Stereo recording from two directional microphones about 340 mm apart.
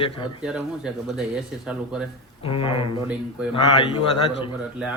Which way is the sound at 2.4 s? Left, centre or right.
Centre.